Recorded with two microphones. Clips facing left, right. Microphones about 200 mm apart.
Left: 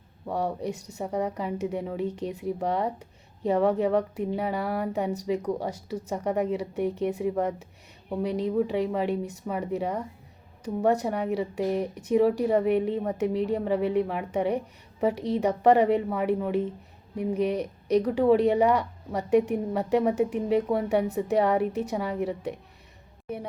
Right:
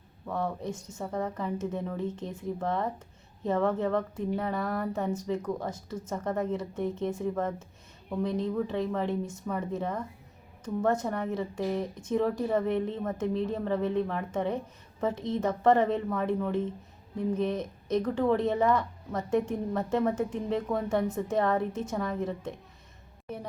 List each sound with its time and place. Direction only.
0.3 s a woman's voice: 15° left (ahead or behind)